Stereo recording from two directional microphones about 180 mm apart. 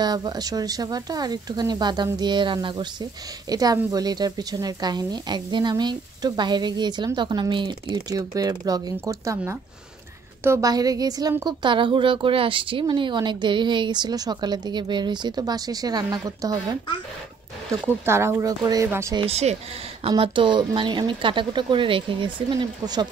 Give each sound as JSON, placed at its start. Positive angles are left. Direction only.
{"t": 0.0, "sound": "speech", "side_deg": -20}
{"t": 18.0, "sound": "a woman's voice", "side_deg": -15}
{"t": 19.1, "sound": "speech", "side_deg": -35}